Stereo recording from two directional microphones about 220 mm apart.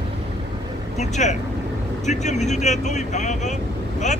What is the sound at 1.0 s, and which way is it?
Speech, 30° left (ahead or behind).